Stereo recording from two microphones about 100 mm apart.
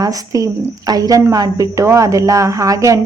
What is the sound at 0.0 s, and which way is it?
A woman's voice, 35° right (ahead or behind).